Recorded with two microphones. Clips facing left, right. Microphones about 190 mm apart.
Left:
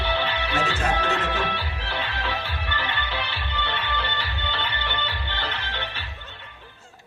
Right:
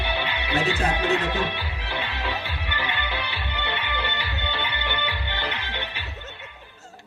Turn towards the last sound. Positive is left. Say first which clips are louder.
# even
turn(degrees=-15)  # may be behind; listen again after turning